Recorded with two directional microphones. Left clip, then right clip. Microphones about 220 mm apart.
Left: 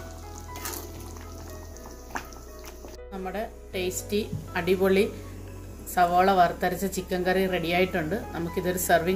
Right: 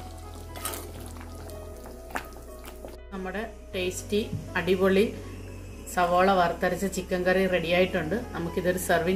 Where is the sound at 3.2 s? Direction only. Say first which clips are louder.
Left 1 dB; 5° left (ahead or behind).